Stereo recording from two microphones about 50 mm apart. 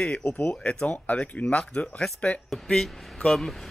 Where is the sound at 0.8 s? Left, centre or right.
Left.